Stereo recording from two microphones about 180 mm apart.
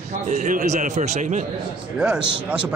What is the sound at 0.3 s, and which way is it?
A man's voice, 45° right (ahead or behind).